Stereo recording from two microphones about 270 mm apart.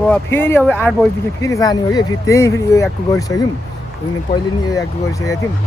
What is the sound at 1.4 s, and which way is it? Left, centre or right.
Speech, centre.